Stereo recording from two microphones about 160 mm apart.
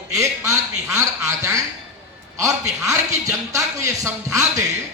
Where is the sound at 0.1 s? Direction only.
20° right (ahead or behind).